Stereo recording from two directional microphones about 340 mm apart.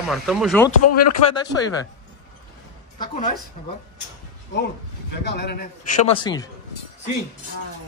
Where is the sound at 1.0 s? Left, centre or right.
Centre.